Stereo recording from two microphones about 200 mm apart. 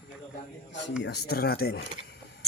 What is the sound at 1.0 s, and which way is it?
Speech, 55° left (ahead or behind).